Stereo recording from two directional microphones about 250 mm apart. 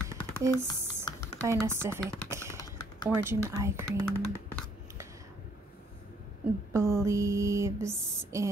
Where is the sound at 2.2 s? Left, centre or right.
Centre.